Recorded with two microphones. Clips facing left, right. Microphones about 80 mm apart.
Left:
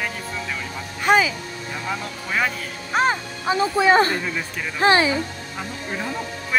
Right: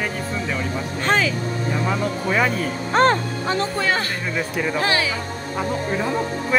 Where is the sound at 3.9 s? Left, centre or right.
Left.